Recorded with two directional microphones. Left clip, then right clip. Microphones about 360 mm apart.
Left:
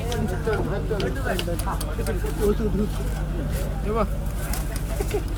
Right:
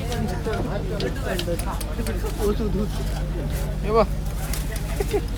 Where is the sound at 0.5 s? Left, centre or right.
Left.